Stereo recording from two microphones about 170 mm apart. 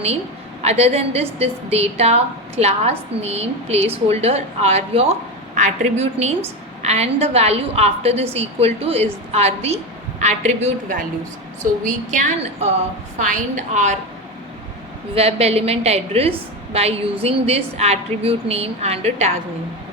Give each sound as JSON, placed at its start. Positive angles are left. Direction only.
{"t": 0.6, "sound": "a woman's voice", "side_deg": -40}
{"t": 12.1, "sound": "a woman's voice", "side_deg": -40}
{"t": 15.1, "sound": "a woman's voice", "side_deg": -35}